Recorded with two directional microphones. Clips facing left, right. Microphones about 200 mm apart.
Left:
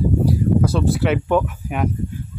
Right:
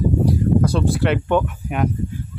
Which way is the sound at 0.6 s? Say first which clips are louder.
Even; centre (ahead or behind).